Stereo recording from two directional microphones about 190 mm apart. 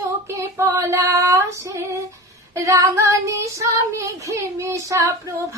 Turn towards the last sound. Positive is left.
turn(degrees=-15)  # may be behind; listen again after turning